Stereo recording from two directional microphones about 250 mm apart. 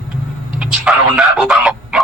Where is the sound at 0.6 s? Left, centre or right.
Centre.